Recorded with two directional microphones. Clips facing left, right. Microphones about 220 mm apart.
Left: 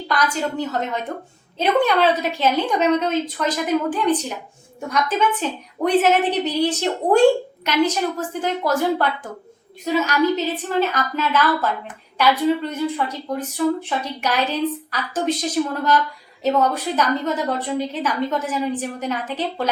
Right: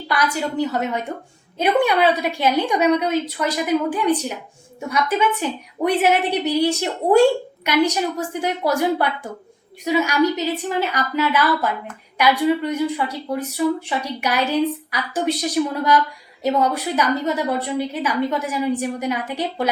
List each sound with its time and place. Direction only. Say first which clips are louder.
0.1 s a woman's voice: even; 10° right (ahead or behind)